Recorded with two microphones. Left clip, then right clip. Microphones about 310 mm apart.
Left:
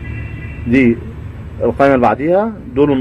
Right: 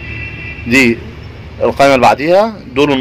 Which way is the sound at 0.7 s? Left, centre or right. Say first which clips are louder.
Right 3 dB; right.